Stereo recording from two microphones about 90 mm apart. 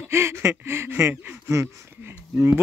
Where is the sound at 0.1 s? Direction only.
30° right (ahead or behind).